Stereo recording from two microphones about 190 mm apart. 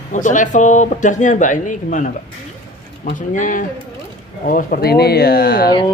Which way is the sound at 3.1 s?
45° left (ahead or behind).